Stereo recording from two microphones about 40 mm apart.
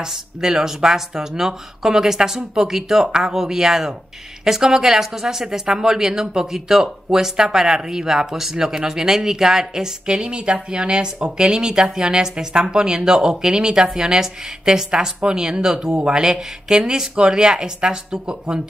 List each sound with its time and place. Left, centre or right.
0.0 s a woman's voice: centre